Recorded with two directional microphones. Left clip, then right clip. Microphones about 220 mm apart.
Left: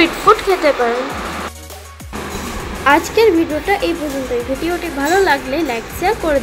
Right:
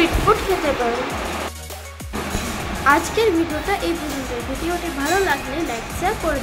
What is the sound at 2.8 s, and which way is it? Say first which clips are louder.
Speech: left 5 dB; 15° left (ahead or behind).